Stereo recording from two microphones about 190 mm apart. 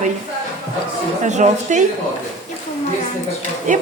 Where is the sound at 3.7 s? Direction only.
40° right (ahead or behind).